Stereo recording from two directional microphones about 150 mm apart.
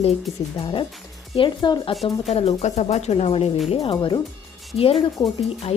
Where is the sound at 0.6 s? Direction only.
35° left (ahead or behind).